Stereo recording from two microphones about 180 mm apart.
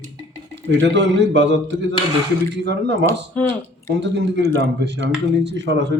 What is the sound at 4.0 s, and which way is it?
Speech, 75° right (ahead or behind).